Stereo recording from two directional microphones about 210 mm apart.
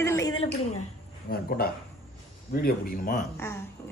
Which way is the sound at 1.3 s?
45° left (ahead or behind).